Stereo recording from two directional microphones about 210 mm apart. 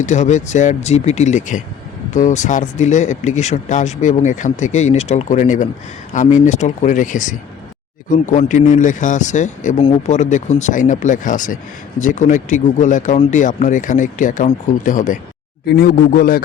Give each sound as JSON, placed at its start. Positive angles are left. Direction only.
{"t": 0.0, "sound": "a man's voice", "side_deg": 35}